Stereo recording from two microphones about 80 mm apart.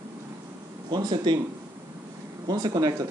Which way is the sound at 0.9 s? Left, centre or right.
Right.